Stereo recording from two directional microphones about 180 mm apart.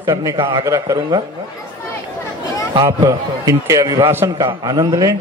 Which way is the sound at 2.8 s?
15° right (ahead or behind).